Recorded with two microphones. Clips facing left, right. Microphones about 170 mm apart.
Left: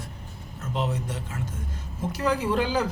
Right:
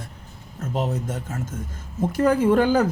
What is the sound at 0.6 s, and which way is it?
Speech, 45° right (ahead or behind).